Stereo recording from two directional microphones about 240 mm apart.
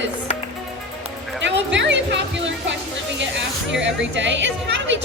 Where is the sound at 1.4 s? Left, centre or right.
Right.